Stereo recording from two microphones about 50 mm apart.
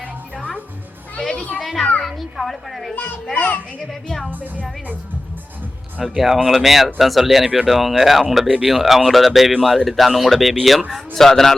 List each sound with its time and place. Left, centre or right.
1.2 s children playing: centre
1.6 s a child's voice: centre
3.3 s a child's voice: left
6.1 s speech: centre